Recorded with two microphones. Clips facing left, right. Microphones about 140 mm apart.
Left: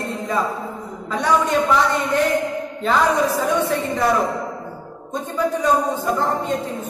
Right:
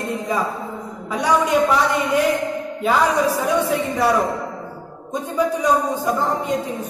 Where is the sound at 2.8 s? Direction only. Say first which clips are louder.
Even; 10° right (ahead or behind).